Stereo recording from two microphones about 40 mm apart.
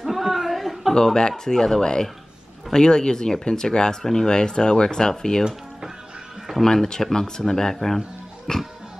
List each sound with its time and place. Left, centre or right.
0.0 s chuckle: centre
0.9 s speech: centre
6.7 s speech: centre